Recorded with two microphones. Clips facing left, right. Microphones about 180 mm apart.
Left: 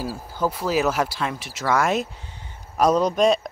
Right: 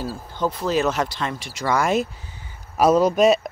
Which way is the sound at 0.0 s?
5° left (ahead or behind).